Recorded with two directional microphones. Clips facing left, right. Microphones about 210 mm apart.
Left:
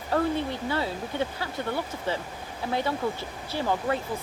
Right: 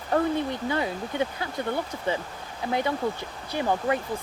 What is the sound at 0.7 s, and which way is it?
Speech, 15° right (ahead or behind).